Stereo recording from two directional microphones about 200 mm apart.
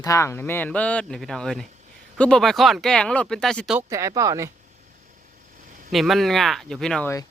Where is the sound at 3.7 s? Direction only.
15° right (ahead or behind).